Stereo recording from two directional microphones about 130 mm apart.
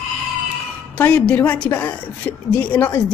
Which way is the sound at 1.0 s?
10° left (ahead or behind).